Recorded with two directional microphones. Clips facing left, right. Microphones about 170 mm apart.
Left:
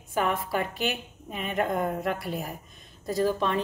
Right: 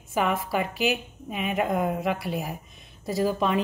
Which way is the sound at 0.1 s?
5° right (ahead or behind).